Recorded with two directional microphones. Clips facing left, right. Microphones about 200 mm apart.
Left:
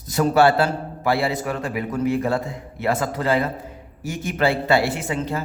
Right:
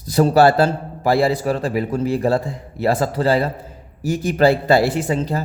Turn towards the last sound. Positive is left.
turn(degrees=-35)  # may be behind; listen again after turning